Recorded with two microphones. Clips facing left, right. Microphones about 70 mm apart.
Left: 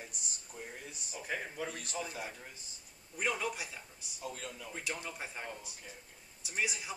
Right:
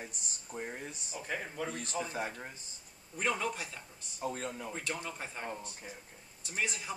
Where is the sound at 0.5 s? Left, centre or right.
Right.